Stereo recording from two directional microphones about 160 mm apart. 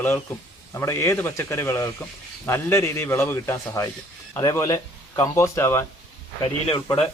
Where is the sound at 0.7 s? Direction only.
15° left (ahead or behind).